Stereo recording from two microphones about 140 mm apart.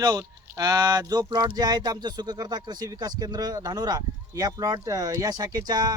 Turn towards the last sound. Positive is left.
turn(degrees=-30)  # may be behind; listen again after turning